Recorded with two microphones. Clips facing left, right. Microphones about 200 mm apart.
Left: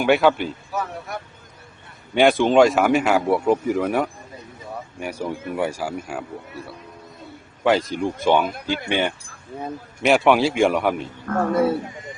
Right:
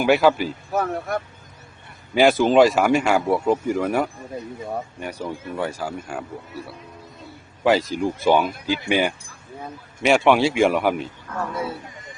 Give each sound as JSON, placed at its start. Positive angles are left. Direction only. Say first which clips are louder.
{"t": 0.0, "sound": "speech", "louder": "even", "side_deg": 0}
{"t": 0.7, "sound": "speech", "louder": "right 5 dB", "side_deg": -50}
{"t": 2.1, "sound": "speech", "louder": "even", "side_deg": 0}
{"t": 11.3, "sound": "speech", "louder": "left 10 dB", "side_deg": 55}